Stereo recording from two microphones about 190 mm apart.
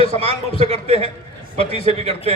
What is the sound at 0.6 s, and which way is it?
A man's voice, 30° right (ahead or behind).